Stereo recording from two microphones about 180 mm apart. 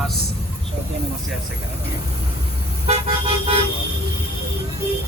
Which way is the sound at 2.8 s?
35° right (ahead or behind).